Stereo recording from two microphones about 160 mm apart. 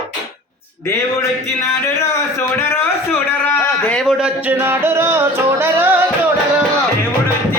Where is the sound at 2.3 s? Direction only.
15° left (ahead or behind).